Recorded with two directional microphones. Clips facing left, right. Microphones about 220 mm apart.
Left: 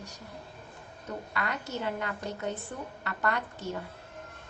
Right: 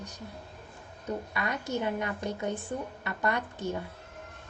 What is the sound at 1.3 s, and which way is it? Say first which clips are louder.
A woman's voice: right 1 dB; 20° right (ahead or behind).